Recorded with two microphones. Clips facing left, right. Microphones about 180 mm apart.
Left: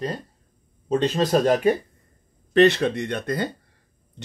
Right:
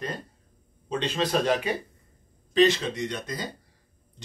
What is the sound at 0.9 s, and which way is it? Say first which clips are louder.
Speech: left 6 dB; 40° left (ahead or behind).